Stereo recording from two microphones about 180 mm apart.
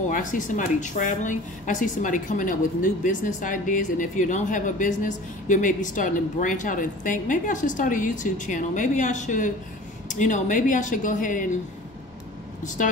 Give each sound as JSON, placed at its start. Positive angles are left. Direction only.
{"t": 0.1, "sound": "speech", "side_deg": 45}